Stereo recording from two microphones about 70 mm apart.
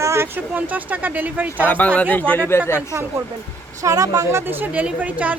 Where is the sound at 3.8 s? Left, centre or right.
Right.